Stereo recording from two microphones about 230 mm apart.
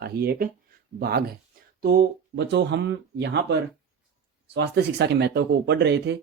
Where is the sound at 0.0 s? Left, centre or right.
Right.